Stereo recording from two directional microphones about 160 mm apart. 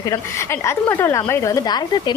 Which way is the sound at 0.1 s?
15° left (ahead or behind).